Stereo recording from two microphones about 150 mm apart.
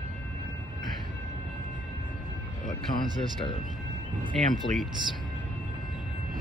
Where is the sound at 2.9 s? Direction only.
60° left (ahead or behind).